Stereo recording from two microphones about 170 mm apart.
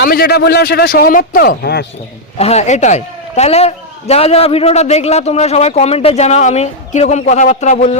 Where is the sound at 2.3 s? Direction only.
40° left (ahead or behind).